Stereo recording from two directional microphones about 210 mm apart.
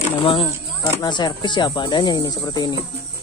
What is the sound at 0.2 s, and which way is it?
Speech, 25° left (ahead or behind).